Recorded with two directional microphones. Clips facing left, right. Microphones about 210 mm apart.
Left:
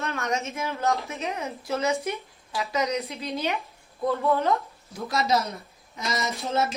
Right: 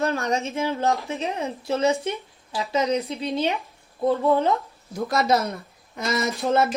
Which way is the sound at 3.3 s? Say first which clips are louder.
Right 3 dB; 30° right (ahead or behind).